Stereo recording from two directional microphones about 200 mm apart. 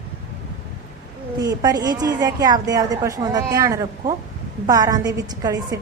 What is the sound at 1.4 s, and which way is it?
A woman's voice, 20° right (ahead or behind).